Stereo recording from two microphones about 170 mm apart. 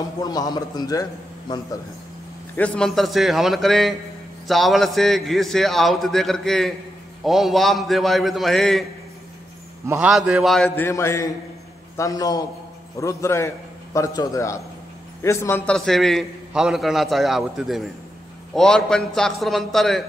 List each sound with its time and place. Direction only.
0.2 s a man's voice: 20° left (ahead or behind)
2.5 s a man's voice: 5° left (ahead or behind)
9.8 s a man's voice: 5° right (ahead or behind)
10.8 s a man's voice: 15° left (ahead or behind)